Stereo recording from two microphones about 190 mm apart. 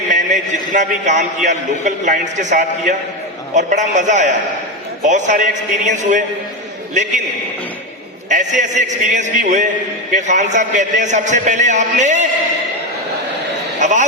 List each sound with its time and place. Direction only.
0.7 s a man's voice: 40° right (ahead or behind)
8.3 s a man's voice: 40° right (ahead or behind)
13.7 s a sound: 40° right (ahead or behind)